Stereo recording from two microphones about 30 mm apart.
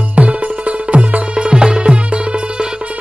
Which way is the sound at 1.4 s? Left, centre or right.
Right.